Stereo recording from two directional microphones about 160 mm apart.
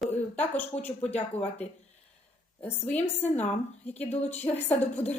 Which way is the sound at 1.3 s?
40° left (ahead or behind).